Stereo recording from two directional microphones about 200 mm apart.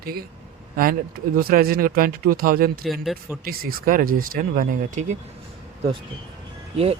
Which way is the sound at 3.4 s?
45° right (ahead or behind).